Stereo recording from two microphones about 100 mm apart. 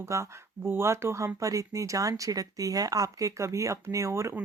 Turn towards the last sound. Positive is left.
turn(degrees=-30)  # may be behind; listen again after turning